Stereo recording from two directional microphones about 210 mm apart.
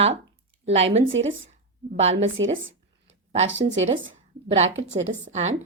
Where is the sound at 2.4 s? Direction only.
20° right (ahead or behind).